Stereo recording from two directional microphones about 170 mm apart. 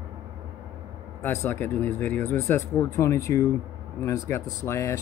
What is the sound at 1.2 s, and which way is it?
Speech, 15° left (ahead or behind).